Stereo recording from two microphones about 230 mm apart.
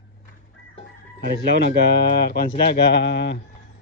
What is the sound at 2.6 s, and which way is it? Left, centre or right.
Speech, left.